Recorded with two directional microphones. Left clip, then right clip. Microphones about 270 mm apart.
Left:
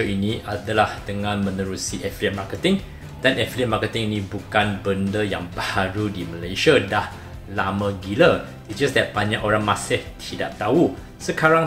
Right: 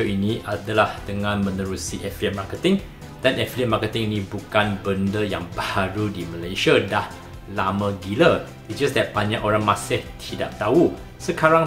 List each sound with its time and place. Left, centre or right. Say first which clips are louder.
0.2 s speech: right 1 dB; centre